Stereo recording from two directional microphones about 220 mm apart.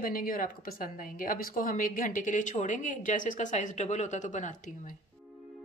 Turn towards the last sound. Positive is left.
turn(degrees=35)  # may be behind; listen again after turning